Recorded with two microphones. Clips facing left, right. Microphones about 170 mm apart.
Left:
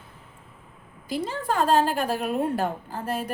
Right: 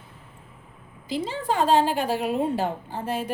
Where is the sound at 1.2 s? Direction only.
15° right (ahead or behind).